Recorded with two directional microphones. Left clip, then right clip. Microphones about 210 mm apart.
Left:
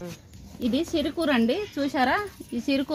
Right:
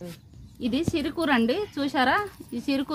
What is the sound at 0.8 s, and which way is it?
Speech, 10° left (ahead or behind).